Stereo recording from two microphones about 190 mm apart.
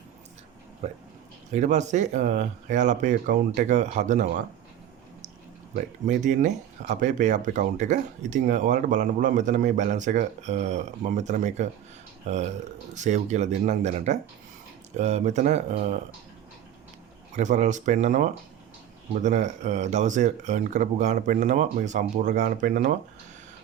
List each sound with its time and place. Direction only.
0.8 s speech: 35° right (ahead or behind)
5.7 s speech: 40° right (ahead or behind)
17.3 s speech: 40° right (ahead or behind)